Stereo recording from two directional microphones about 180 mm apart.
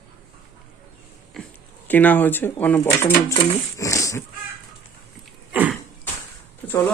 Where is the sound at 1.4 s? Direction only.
Centre (ahead or behind).